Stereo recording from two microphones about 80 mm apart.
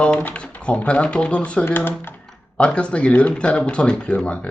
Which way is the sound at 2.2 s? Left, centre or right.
Centre.